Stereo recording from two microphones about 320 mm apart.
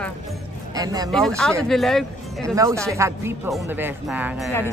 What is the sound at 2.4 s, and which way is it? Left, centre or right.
Speech, centre.